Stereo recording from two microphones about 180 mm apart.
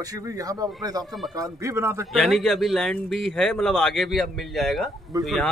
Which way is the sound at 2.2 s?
Centre (ahead or behind).